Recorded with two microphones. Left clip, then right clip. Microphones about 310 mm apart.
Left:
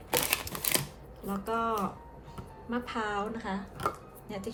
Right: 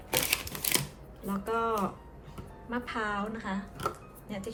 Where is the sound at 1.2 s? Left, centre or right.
Centre.